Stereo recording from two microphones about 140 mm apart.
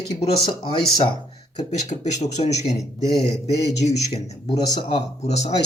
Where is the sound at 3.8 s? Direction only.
55° left (ahead or behind).